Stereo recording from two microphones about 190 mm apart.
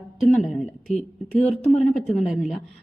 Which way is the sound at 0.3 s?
Centre (ahead or behind).